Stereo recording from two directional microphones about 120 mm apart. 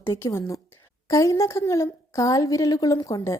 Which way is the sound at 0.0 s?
20° left (ahead or behind).